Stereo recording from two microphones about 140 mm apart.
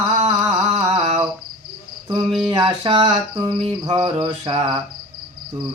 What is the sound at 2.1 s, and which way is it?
Speech, 30° right (ahead or behind).